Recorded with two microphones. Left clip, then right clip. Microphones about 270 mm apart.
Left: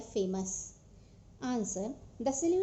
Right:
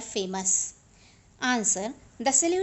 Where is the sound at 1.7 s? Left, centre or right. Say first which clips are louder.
Right 9 dB; right.